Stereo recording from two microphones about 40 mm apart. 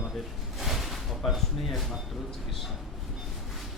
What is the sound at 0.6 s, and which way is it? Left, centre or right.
Speech, centre.